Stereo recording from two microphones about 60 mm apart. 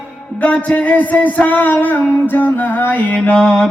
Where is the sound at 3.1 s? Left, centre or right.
Centre.